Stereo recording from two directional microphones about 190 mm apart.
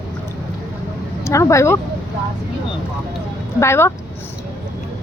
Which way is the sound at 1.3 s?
15° left (ahead or behind).